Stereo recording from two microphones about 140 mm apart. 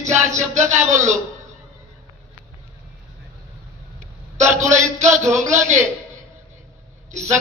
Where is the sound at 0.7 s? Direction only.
60° right (ahead or behind).